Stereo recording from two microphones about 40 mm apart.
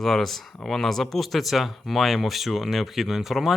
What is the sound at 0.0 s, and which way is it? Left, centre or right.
Speech, centre.